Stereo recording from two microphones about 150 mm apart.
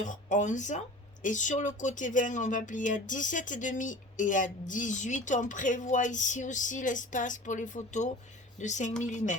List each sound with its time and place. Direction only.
0.0 s speech: 55° left (ahead or behind)